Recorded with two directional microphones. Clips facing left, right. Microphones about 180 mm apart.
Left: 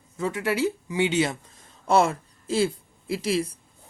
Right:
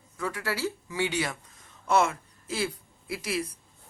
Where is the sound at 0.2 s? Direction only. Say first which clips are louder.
Left 6 dB; 20° left (ahead or behind).